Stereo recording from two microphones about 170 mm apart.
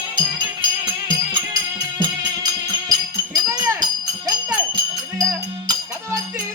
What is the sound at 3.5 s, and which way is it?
Jingle bell, 20° right (ahead or behind).